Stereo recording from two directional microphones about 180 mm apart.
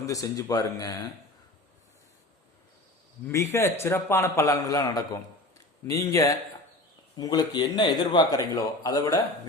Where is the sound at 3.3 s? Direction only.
15° left (ahead or behind).